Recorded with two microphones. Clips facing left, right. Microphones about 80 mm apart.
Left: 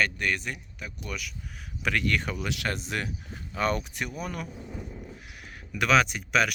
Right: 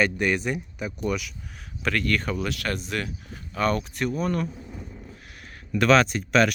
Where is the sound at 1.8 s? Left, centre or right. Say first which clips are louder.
Right 2 dB; centre.